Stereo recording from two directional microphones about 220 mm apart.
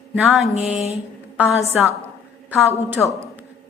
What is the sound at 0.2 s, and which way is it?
A woman's voice, centre (ahead or behind).